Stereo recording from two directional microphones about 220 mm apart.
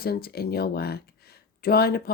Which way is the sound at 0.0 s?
45° left (ahead or behind).